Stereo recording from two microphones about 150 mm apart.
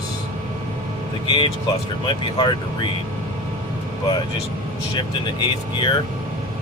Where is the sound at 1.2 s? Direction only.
35° left (ahead or behind).